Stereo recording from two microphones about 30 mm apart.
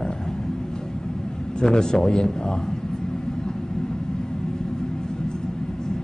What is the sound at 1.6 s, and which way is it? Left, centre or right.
Speech, left.